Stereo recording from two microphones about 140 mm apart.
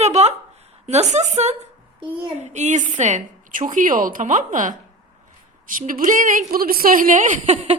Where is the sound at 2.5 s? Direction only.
60° right (ahead or behind).